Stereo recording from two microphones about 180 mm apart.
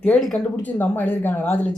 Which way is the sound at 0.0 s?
5° left (ahead or behind).